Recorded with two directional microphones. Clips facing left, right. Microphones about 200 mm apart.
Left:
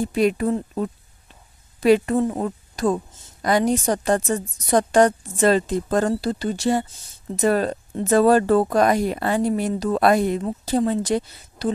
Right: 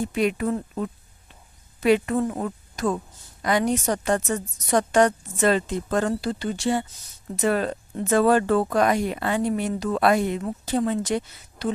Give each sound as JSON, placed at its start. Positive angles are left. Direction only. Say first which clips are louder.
{"t": 0.0, "sound": "a woman's voice", "louder": "left 3 dB", "side_deg": 35}